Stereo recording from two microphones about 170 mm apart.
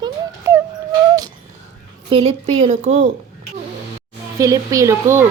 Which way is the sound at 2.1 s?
35° right (ahead or behind).